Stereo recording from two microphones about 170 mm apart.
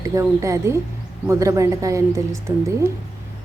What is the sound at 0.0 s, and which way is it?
A woman's voice, 15° right (ahead or behind).